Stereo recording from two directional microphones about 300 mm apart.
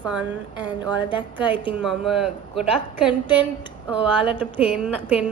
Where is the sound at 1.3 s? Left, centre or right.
Centre.